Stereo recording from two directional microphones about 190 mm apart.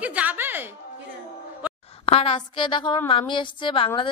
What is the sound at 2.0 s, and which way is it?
A woman's voice, 30° left (ahead or behind).